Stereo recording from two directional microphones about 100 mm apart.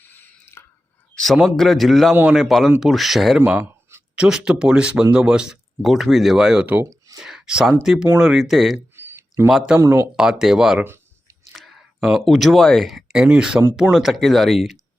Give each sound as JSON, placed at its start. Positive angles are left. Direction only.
{"t": 0.0, "sound": "a sound", "side_deg": 20}
{"t": 1.1, "sound": "speech", "side_deg": 0}
{"t": 9.0, "sound": "a sound", "side_deg": -25}
{"t": 9.5, "sound": "speech", "side_deg": 0}
{"t": 9.8, "sound": "speech", "side_deg": -30}
{"t": 10.2, "sound": "speech", "side_deg": -5}